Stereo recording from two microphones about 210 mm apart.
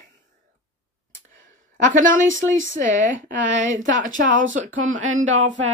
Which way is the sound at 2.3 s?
65° right (ahead or behind).